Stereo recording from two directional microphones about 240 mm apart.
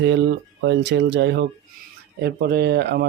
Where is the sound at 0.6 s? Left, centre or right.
Right.